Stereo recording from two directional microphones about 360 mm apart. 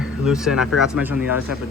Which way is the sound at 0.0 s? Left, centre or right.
Centre.